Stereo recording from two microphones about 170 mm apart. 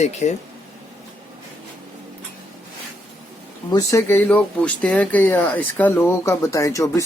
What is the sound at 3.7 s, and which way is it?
Speech, 15° left (ahead or behind).